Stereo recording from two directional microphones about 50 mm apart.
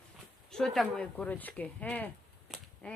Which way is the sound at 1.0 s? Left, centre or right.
Left.